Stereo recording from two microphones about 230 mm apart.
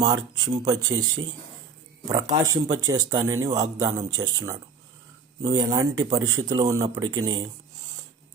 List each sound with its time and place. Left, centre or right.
0.0 s speech: centre